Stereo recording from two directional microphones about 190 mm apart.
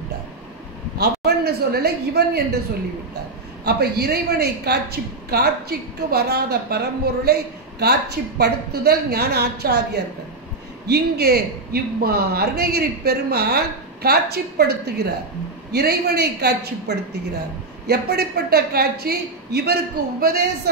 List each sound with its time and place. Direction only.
0.9 s speech: 60° right (ahead or behind)
3.6 s speech: 55° right (ahead or behind)
10.9 s speech: 55° right (ahead or behind)